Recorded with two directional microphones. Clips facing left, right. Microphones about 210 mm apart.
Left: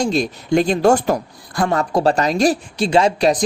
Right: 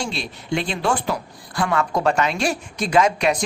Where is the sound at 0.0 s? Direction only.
40° left (ahead or behind).